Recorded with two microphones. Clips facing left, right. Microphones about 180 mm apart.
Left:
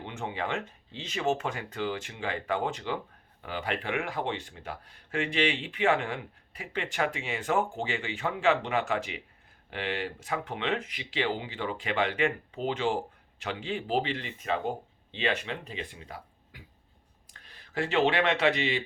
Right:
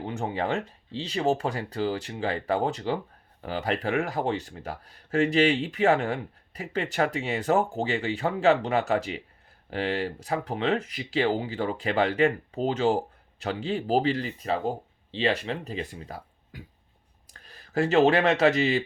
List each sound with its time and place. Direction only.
0.0 s speech: 40° right (ahead or behind)